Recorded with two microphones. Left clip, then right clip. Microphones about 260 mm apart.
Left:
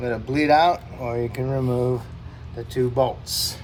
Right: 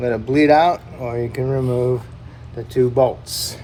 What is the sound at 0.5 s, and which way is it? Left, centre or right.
Speech, left.